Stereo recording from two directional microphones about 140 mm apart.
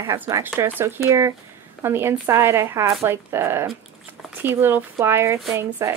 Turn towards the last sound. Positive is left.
turn(degrees=-20)  # may be behind; listen again after turning